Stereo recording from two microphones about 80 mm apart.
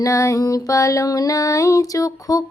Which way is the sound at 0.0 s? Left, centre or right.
Left.